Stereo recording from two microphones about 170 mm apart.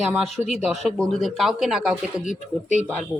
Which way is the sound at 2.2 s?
45° left (ahead or behind).